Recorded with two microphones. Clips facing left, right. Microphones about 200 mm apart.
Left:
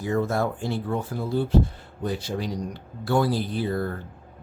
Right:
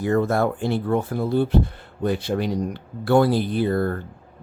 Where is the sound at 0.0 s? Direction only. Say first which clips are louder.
Right 4 dB; 60° right (ahead or behind).